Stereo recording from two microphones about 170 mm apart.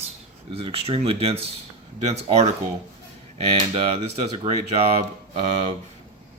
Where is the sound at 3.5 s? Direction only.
35° right (ahead or behind).